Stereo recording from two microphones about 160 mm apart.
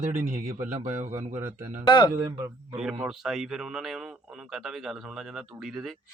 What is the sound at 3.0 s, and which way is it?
Speech, 5° right (ahead or behind).